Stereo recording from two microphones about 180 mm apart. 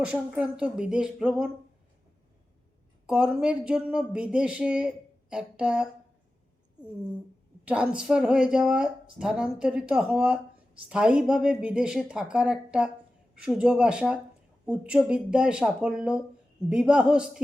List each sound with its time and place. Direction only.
0.0 s speech: 5° right (ahead or behind)
3.1 s speech: 5° right (ahead or behind)
7.6 s speech: 5° right (ahead or behind)